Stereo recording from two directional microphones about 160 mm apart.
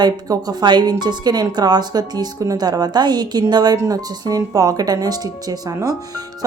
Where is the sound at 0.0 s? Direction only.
25° right (ahead or behind).